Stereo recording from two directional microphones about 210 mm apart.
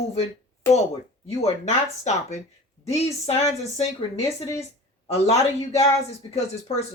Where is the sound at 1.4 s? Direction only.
30° left (ahead or behind).